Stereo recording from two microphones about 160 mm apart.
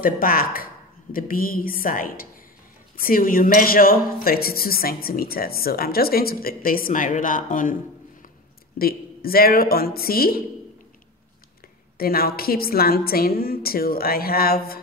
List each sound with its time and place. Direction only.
0.0 s a woman's voice: 65° left (ahead or behind)
8.7 s speech: 70° left (ahead or behind)
12.0 s speech: 70° left (ahead or behind)